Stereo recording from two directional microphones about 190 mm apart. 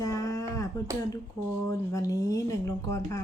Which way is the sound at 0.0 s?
15° left (ahead or behind).